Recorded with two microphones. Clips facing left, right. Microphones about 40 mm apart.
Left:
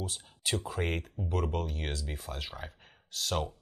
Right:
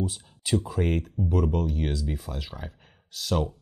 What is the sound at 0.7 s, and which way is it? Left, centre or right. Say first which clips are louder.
Speech: right 6 dB; centre.